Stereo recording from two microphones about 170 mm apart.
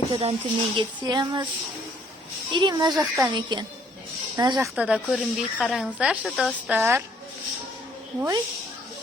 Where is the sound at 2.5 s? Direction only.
25° right (ahead or behind).